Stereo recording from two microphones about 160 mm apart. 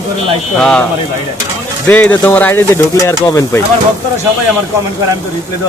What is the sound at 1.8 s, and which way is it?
Speech, 10° left (ahead or behind).